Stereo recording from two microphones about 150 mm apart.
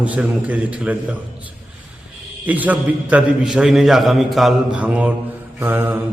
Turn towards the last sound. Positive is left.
turn(degrees=-15)  # may be behind; listen again after turning